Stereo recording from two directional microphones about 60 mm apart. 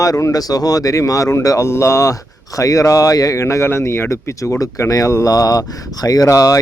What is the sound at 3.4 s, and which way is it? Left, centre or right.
Speech, left.